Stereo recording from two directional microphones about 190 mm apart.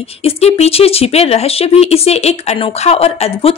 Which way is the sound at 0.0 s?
30° left (ahead or behind).